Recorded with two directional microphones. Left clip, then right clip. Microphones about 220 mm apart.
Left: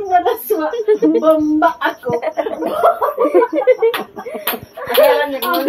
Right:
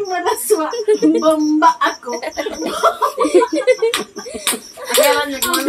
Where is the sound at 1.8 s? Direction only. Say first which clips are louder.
Left 1 dB; 20° right (ahead or behind).